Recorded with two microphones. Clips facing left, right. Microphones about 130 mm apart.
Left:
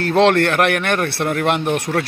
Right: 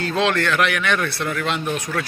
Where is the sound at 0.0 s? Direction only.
65° left (ahead or behind).